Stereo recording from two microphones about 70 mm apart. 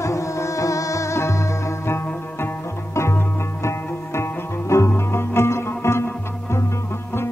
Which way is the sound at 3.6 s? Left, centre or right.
Left.